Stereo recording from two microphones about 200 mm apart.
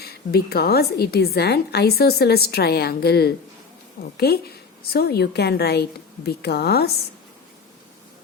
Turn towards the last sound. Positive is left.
turn(degrees=50)  # may be behind; listen again after turning